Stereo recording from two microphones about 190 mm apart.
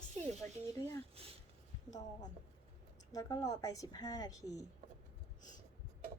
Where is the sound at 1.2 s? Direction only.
30° right (ahead or behind).